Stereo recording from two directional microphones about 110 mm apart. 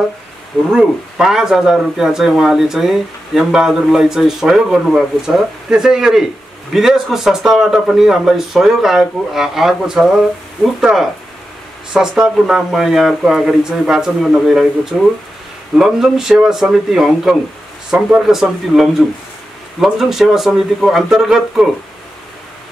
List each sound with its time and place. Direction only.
0.7 s speech: 5° right (ahead or behind)